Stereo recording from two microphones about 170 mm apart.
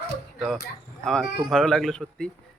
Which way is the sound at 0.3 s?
Centre (ahead or behind).